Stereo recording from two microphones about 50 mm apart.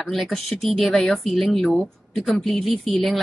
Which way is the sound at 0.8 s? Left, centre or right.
Centre.